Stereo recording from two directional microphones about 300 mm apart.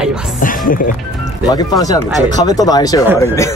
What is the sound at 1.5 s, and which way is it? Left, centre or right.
Speech, centre.